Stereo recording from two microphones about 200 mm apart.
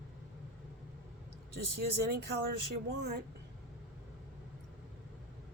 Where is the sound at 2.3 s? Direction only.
55° right (ahead or behind).